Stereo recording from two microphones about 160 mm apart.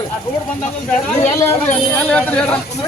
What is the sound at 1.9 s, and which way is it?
Speech, 10° left (ahead or behind).